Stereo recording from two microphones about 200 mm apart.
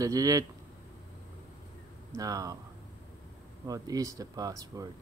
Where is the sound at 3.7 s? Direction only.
15° right (ahead or behind).